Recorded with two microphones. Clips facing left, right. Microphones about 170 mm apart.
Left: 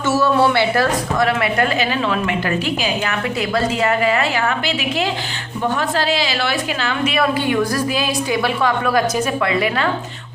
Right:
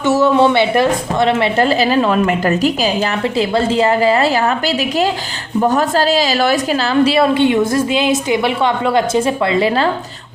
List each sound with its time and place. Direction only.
0.0 s a woman's voice: 20° right (ahead or behind); by 2.9 s 40° right (ahead or behind)
3.3 s a woman's voice: 25° right (ahead or behind)